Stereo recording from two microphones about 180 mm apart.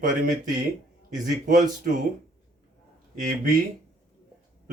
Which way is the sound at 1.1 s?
45° right (ahead or behind).